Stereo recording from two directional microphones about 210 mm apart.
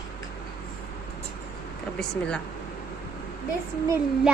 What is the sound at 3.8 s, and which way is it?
Speech, 10° right (ahead or behind).